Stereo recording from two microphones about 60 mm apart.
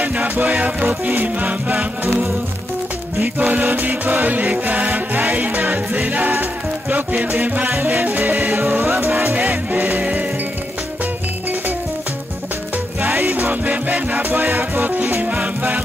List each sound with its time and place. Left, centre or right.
0.0 s music: right
3.3 s music: right
8.8 s music: right
9.9 s music: right
13.0 s music: right
13.3 s music: right
15.2 s music: right